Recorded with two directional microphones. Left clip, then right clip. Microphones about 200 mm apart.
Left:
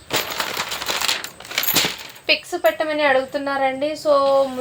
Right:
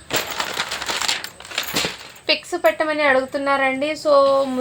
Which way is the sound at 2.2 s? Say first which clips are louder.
Even; 20° right (ahead or behind).